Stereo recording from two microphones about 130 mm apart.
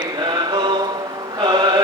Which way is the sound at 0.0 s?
35° right (ahead or behind).